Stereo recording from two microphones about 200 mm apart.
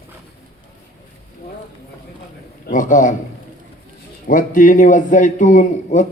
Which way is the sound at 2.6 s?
40° left (ahead or behind).